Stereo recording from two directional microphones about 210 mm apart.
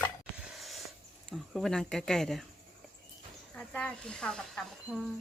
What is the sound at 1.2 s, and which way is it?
Speech, centre (ahead or behind).